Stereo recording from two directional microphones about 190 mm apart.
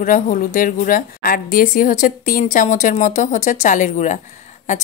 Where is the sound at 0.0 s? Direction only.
45° left (ahead or behind).